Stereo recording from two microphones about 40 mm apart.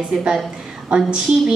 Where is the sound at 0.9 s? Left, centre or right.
Right.